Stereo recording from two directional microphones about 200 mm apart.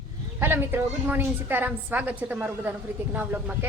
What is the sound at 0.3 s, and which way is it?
A woman's voice, 10° right (ahead or behind).